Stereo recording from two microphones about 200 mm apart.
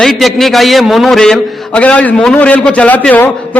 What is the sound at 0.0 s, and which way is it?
A man's voice, centre (ahead or behind).